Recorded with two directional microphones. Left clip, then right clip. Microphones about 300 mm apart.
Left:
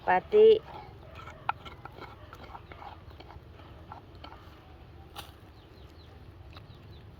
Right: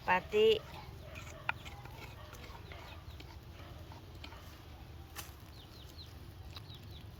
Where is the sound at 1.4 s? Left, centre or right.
Centre.